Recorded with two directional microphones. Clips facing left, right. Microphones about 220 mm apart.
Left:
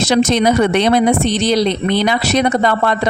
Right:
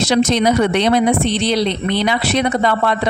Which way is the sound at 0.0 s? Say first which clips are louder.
Left 1 dB; 50° left (ahead or behind).